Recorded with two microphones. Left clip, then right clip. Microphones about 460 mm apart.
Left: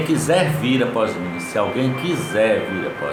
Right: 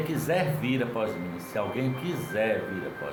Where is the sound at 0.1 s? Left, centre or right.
Right.